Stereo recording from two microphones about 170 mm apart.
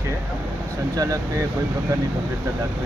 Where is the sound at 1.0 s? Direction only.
20° right (ahead or behind).